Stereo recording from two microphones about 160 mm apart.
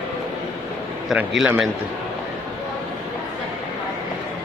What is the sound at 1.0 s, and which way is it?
Speech, centre (ahead or behind).